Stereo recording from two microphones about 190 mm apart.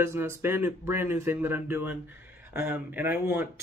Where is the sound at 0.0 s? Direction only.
15° right (ahead or behind).